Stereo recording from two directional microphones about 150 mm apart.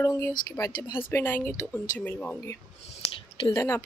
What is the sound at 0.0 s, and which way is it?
Speech, 20° left (ahead or behind).